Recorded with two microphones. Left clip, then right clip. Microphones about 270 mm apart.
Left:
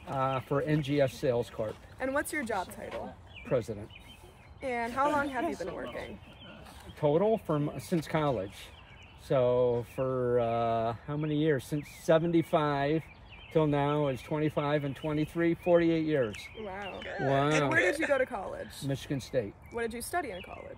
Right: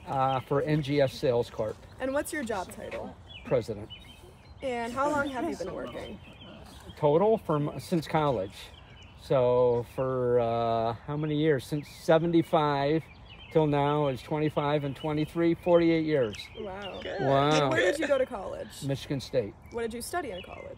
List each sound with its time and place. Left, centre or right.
0.1 s speech: centre
2.0 s speech: centre
5.4 s speech: left
7.0 s speech: centre